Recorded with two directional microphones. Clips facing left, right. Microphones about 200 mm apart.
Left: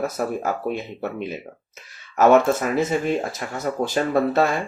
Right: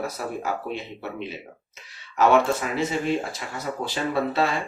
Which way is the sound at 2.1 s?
45° left (ahead or behind).